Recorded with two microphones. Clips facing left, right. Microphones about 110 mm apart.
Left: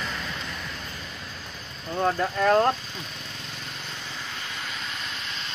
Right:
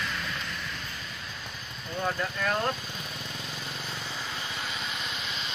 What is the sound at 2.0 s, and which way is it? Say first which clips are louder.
Speech: left 7 dB; 40° left (ahead or behind).